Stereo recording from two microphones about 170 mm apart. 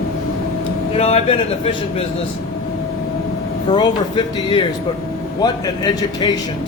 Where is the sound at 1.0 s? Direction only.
35° left (ahead or behind).